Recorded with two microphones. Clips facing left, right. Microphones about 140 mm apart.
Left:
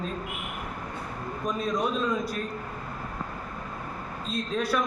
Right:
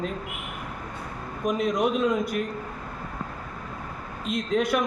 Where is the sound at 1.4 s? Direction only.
20° right (ahead or behind).